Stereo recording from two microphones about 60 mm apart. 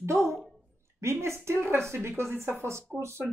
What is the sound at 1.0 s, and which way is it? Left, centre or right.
Speech, right.